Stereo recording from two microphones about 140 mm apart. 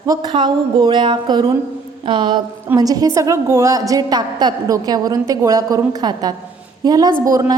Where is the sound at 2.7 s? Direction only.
25° right (ahead or behind).